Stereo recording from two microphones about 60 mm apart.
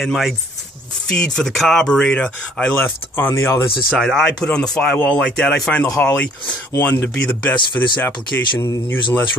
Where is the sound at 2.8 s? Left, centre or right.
Left.